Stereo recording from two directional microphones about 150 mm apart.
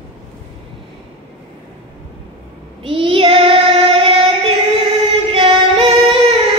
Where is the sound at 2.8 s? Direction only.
35° right (ahead or behind).